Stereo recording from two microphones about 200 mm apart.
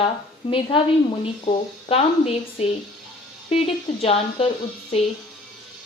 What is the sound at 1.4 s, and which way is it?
A woman's voice, 30° left (ahead or behind).